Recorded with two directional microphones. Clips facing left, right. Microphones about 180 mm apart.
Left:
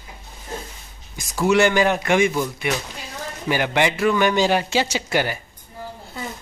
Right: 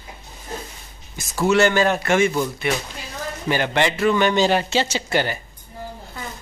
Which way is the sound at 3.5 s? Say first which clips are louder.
Even; 15° left (ahead or behind).